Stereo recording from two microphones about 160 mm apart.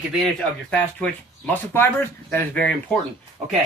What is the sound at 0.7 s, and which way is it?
Speech, 10° left (ahead or behind).